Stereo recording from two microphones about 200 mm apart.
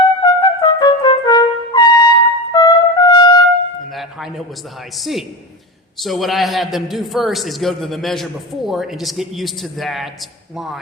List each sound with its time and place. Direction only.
0.2 s trumpet: 20° left (ahead or behind)
4.9 s a man's voice: centre (ahead or behind)